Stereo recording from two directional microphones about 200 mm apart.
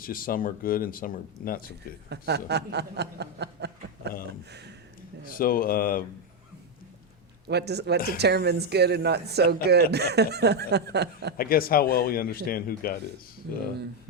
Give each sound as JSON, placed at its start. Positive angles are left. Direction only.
{"t": 0.0, "sound": "speech", "side_deg": 45}
{"t": 2.0, "sound": "chuckle", "side_deg": -55}
{"t": 5.4, "sound": "speech", "side_deg": 45}
{"t": 7.4, "sound": "speech", "side_deg": -55}
{"t": 11.3, "sound": "speech", "side_deg": 45}